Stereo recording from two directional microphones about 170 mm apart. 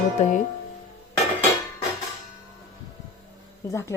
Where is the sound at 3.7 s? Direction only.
15° left (ahead or behind).